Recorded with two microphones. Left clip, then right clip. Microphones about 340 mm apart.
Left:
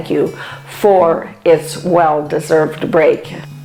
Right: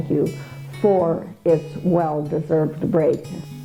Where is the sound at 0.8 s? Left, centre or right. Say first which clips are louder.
Left 8 dB; left.